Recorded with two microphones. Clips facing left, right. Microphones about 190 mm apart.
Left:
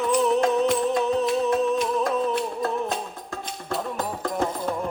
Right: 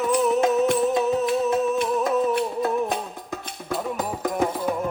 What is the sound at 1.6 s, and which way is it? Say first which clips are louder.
Music: even; 5° right (ahead or behind).